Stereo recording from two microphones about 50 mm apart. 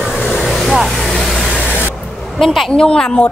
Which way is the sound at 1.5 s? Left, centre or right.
Centre.